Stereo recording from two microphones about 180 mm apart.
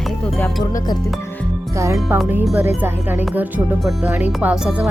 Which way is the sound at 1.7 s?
15° right (ahead or behind).